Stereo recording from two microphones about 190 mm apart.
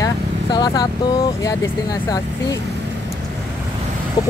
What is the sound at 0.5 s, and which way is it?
Speech, 20° left (ahead or behind).